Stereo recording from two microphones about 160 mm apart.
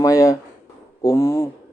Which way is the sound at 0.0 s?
20° left (ahead or behind).